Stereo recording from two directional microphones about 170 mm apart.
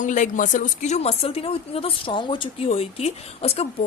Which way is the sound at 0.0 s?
50° left (ahead or behind).